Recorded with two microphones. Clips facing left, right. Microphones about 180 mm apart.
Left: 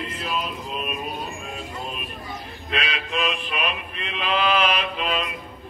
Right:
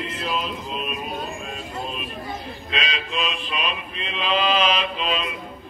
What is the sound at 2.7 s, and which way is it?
Mantra, 60° left (ahead or behind).